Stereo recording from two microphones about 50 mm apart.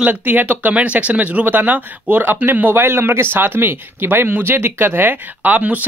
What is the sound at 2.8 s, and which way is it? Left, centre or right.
Speech, right.